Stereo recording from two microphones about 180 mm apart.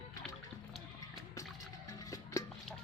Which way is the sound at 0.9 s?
20° left (ahead or behind).